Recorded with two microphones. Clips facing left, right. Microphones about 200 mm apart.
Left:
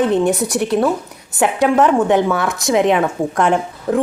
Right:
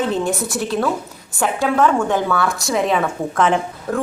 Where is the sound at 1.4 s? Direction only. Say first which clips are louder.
Left 4 dB; 20° left (ahead or behind).